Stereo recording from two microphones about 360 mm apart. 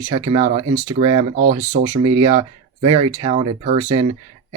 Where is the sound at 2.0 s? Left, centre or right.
Centre.